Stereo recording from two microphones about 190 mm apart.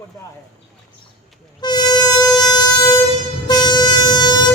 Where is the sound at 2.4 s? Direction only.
20° left (ahead or behind).